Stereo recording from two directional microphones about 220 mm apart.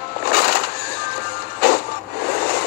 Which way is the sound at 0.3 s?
45° left (ahead or behind).